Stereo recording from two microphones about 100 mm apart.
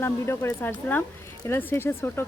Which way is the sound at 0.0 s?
25° left (ahead or behind).